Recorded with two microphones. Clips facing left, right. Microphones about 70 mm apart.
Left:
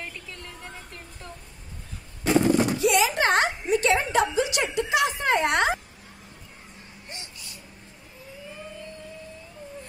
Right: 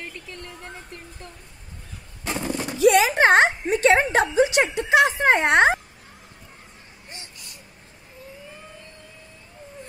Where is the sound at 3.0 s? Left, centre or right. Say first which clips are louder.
Right 6 dB; right.